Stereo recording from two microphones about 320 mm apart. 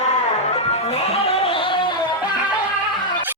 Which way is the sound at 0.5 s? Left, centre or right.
Centre.